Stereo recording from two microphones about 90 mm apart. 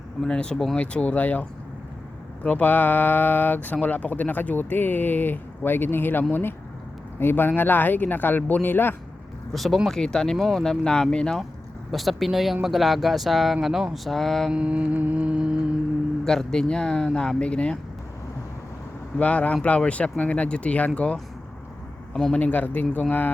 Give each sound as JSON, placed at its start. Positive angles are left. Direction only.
{"t": 0.2, "sound": "speech", "side_deg": 10}
{"t": 9.5, "sound": "speech", "side_deg": 0}
{"t": 14.5, "sound": "music", "side_deg": -10}
{"t": 16.2, "sound": "speech", "side_deg": 5}
{"t": 19.2, "sound": "speech", "side_deg": 15}